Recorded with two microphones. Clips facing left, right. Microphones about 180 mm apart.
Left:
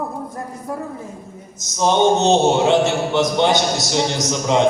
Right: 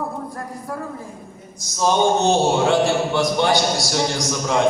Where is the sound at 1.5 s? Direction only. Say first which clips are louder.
Left 2 dB; 20° left (ahead or behind).